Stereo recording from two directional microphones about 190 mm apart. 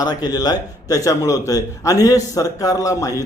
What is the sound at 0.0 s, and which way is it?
A man's voice, 20° left (ahead or behind).